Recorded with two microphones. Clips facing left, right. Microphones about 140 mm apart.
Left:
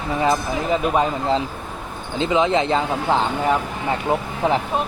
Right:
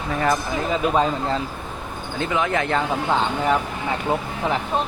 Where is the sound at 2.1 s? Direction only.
20° left (ahead or behind).